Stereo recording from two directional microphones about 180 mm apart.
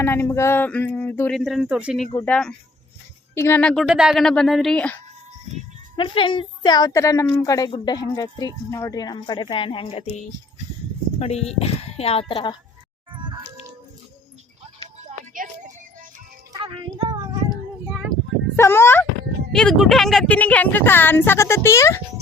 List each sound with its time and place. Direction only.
0.0 s speech: 15° left (ahead or behind)
1.6 s speech: 5° right (ahead or behind)
2.2 s speech: 5° left (ahead or behind)
6.0 s speech: 25° left (ahead or behind)
11.2 s speech: 35° left (ahead or behind)
13.1 s music: 25° right (ahead or behind)
14.9 s music: 45° right (ahead or behind)
16.5 s a sound: 30° right (ahead or behind)
18.1 s a sound: 10° left (ahead or behind)
19.5 s speech: centre (ahead or behind)